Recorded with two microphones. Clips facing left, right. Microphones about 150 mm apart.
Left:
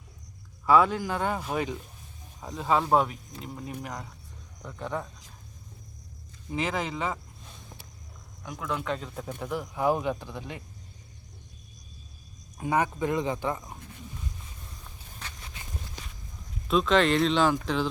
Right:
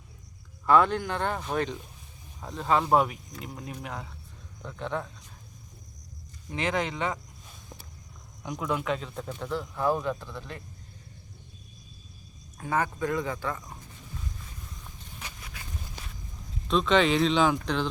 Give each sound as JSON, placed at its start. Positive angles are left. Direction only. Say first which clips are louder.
{"t": 0.6, "sound": "speech", "louder": "even", "side_deg": 5}
{"t": 6.5, "sound": "speech", "louder": "right 1 dB", "side_deg": 5}
{"t": 8.4, "sound": "speech", "louder": "right 3 dB", "side_deg": -15}
{"t": 8.8, "sound": "speech", "louder": "right 2 dB", "side_deg": 0}
{"t": 12.5, "sound": "speech", "louder": "left 2 dB", "side_deg": 15}
{"t": 15.4, "sound": "walk", "louder": "even", "side_deg": 30}
{"t": 16.6, "sound": "speech", "louder": "even", "side_deg": 5}